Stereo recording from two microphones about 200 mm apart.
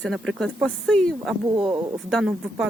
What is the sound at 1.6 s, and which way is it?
Speech, 25° right (ahead or behind).